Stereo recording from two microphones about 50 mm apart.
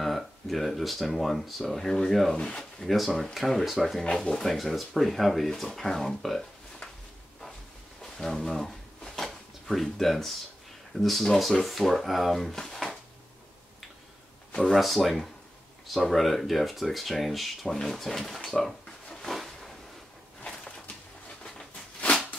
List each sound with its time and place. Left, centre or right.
0.0 s speech: centre
2.3 s speech: centre
2.8 s speech: centre
4.1 s speech: centre
8.0 s a sound: centre
11.0 s speech: centre
14.6 s speech: centre
19.2 s a sound: centre